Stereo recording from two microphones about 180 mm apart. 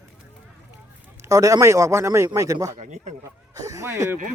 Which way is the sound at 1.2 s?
20° right (ahead or behind).